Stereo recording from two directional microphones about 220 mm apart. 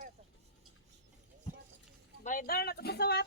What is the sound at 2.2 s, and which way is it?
Speech, 40° left (ahead or behind).